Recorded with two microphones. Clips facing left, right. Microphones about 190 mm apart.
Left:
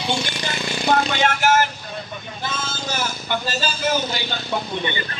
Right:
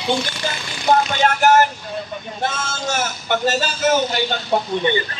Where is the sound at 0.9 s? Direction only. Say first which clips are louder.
Right 3 dB; 40° right (ahead or behind).